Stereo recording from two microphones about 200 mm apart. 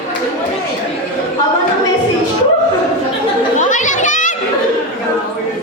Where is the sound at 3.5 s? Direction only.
40° left (ahead or behind).